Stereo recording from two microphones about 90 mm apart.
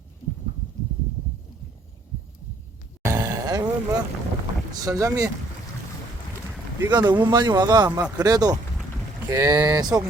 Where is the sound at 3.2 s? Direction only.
45° right (ahead or behind).